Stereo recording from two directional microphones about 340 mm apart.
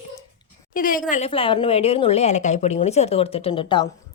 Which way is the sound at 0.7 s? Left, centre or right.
Left.